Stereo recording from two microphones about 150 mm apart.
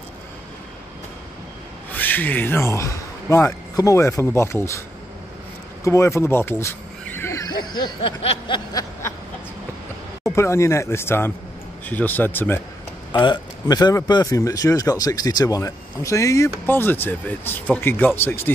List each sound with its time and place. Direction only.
1.9 s speech: 10° left (ahead or behind)
5.9 s a sound: 20° left (ahead or behind)
8.5 s snicker: 30° left (ahead or behind)
10.3 s speech: 20° left (ahead or behind)
13.2 s speech: 30° left (ahead or behind)